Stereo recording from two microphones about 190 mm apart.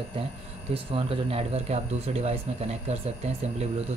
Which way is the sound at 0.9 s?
30° right (ahead or behind).